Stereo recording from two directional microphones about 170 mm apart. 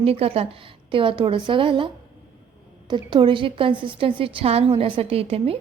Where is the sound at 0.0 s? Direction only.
35° right (ahead or behind).